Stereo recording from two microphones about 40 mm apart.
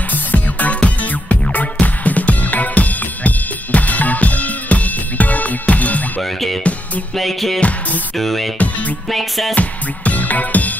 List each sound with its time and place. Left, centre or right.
0.1 s music: left
6.2 s music: centre
8.5 s music: left
9.1 s music: centre
9.6 s music: left